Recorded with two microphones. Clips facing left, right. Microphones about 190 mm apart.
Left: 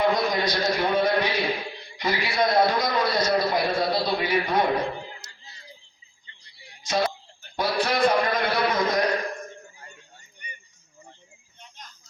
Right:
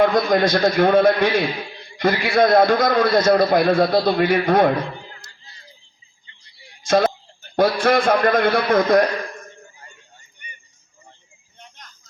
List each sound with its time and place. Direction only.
0.0 s a man's voice: 50° right (ahead or behind)
6.8 s a man's voice: 50° right (ahead or behind)